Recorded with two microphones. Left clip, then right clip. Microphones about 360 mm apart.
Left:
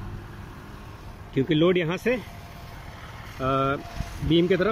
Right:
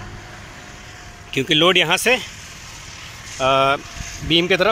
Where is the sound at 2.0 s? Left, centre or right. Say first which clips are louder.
Right 8 dB; right.